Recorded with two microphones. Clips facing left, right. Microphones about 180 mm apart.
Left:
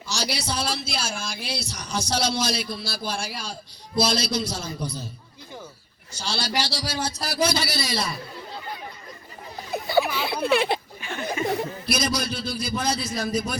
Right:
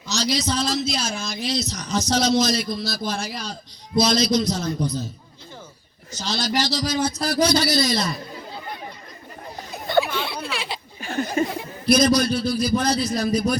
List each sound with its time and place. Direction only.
0.1 s speech: 10° left (ahead or behind)
6.1 s speech: 10° left (ahead or behind)
10.1 s a sound: 5° left (ahead or behind)
10.3 s speech: 55° left (ahead or behind)
11.0 s a sound: 40° right (ahead or behind)
11.9 s speech: 5° left (ahead or behind)